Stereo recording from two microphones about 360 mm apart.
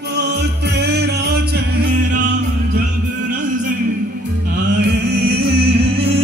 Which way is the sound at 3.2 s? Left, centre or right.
Right.